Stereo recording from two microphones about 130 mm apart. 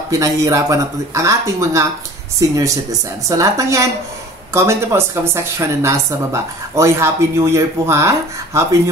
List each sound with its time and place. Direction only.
0.1 s a woman's voice: 25° right (ahead or behind)